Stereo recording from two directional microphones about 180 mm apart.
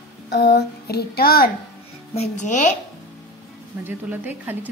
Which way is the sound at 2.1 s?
40° left (ahead or behind).